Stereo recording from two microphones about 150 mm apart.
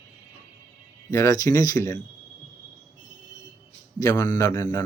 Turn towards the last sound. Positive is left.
turn(degrees=15)  # may be behind; listen again after turning